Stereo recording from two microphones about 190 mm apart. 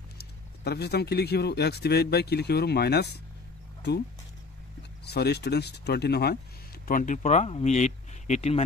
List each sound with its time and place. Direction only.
0.2 s speech: 60° left (ahead or behind)
5.0 s speech: 60° left (ahead or behind); by 8.6 s 35° left (ahead or behind)